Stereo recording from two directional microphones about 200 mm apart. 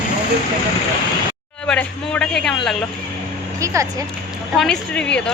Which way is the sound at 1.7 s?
5° left (ahead or behind).